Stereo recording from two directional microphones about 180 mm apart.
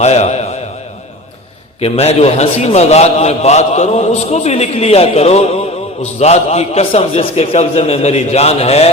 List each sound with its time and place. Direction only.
0.0 s speech: 35° left (ahead or behind)
1.8 s a man's voice: 35° left (ahead or behind)